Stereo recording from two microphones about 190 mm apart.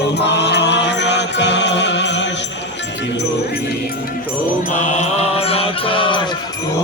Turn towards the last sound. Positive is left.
turn(degrees=25)  # may be behind; listen again after turning